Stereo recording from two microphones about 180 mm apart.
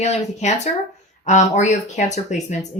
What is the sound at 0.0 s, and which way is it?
Speech, 40° left (ahead or behind).